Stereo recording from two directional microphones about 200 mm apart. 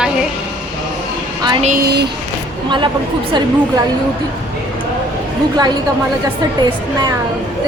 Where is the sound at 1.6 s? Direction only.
40° right (ahead or behind).